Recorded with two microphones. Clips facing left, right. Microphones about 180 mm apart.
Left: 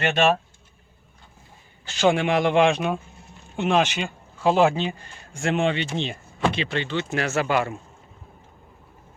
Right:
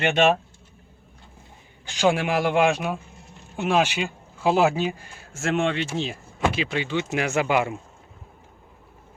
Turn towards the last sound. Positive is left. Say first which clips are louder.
# right 1 dB
turn(degrees=-15)  # may be behind; listen again after turning